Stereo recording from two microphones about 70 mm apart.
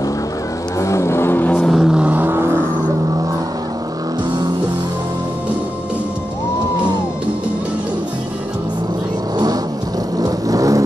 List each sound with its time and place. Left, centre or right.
0.7 s vehicle: left
1.7 s vehicle: centre
2.0 s vehicle: right
10.1 s vehicle: right